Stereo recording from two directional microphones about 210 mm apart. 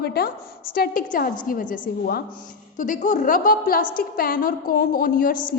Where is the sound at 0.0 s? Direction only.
45° left (ahead or behind).